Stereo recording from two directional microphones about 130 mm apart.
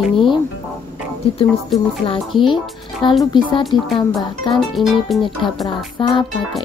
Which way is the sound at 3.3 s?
35° left (ahead or behind).